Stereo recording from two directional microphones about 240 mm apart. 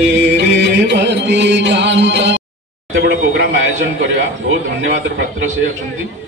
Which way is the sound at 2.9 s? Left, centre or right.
Right.